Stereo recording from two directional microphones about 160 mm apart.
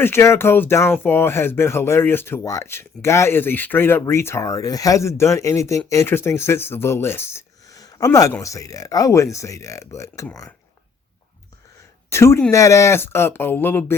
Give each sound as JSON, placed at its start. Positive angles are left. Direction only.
{"t": 0.0, "sound": "speech", "side_deg": 15}
{"t": 12.1, "sound": "speech", "side_deg": 15}